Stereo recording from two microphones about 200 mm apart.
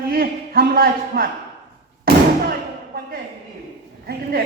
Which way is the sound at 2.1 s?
50° right (ahead or behind).